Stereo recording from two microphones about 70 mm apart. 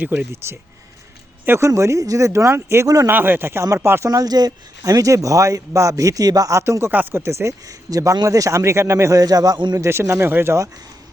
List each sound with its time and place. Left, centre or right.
0.0 s speech: right
0.3 s a man's voice: right
2.8 s speech: right
3.1 s speech: right
4.1 s a man's voice: right
6.9 s speech: right
7.2 s speech: right
7.7 s a man's voice: right